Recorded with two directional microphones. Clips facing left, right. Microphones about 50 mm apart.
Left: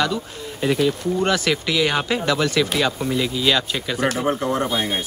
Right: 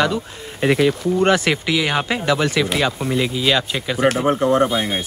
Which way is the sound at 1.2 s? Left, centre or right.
Right.